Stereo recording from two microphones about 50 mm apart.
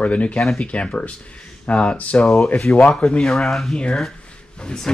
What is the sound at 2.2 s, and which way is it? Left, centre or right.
Speech, centre.